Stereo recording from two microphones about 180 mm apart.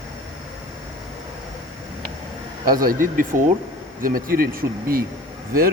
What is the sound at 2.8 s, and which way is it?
Speech, 50° right (ahead or behind).